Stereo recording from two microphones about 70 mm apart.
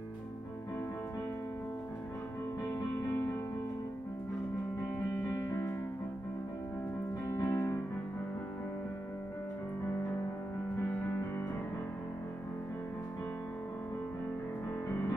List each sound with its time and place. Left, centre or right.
7.2 s music: left
11.0 s music: left